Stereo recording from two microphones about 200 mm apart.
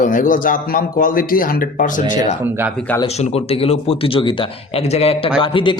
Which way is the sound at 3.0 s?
30° left (ahead or behind).